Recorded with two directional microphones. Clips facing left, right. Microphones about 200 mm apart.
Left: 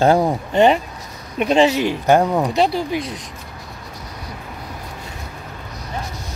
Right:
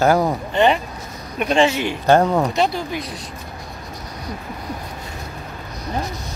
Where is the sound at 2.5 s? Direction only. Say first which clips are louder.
Left 2 dB; 35° left (ahead or behind).